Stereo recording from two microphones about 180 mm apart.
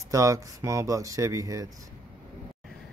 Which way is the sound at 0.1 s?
20° right (ahead or behind).